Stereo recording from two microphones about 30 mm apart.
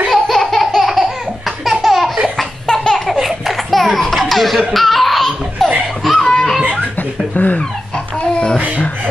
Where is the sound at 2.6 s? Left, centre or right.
Left.